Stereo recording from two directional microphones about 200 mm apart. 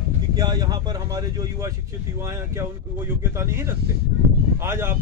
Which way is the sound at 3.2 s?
15° right (ahead or behind).